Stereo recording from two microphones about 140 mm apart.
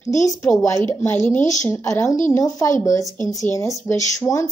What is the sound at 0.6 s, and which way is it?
A woman's voice, 15° left (ahead or behind).